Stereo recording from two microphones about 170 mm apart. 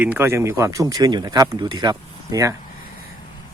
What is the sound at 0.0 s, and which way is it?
Speech, 10° right (ahead or behind).